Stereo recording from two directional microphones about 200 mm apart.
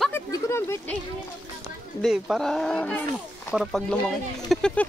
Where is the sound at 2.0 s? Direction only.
Centre (ahead or behind).